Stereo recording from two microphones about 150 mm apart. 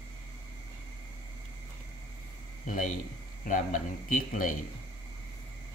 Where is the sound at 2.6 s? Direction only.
60° left (ahead or behind).